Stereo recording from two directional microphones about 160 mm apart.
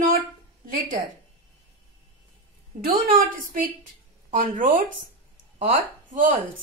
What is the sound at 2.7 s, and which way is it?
A woman's voice, 65° right (ahead or behind).